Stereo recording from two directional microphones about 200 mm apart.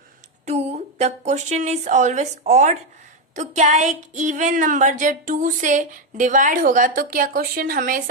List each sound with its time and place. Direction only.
0.4 s a woman's voice: 30° right (ahead or behind)